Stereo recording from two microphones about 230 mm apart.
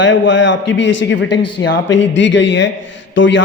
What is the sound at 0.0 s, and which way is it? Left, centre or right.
A man's voice, left.